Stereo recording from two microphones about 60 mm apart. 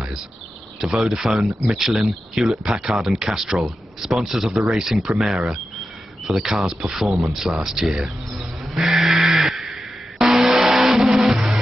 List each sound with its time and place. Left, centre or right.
0.7 s speech: centre
5.3 s speech: centre
7.2 s music: centre